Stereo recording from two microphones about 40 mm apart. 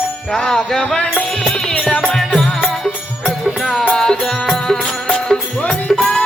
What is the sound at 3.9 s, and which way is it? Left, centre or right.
Music, centre.